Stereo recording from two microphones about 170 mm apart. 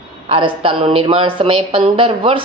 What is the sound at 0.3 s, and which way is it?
A woman's voice, 30° right (ahead or behind).